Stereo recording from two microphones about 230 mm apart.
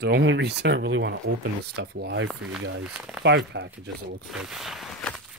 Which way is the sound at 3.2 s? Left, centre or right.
Right.